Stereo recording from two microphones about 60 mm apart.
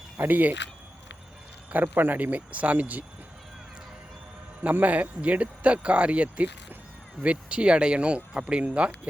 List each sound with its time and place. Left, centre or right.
0.2 s speech: right
1.7 s speech: right
4.6 s speech: right